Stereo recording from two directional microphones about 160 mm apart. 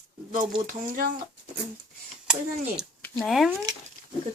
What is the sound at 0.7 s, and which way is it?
Speech, 60° right (ahead or behind).